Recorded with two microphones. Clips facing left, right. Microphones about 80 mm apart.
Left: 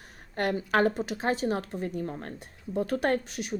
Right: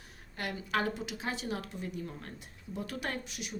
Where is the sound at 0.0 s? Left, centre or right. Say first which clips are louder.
Left 10 dB; left.